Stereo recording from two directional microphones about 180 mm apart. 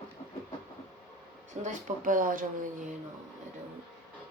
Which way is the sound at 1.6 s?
50° right (ahead or behind).